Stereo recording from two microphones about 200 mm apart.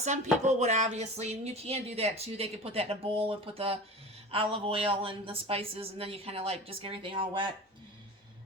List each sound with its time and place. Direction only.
0.0 s speech: 35° right (ahead or behind)